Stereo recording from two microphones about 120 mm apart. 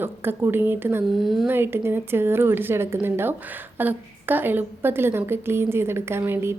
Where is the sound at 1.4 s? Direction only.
20° right (ahead or behind).